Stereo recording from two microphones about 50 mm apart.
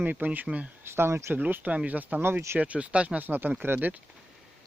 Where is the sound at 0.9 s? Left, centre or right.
Right.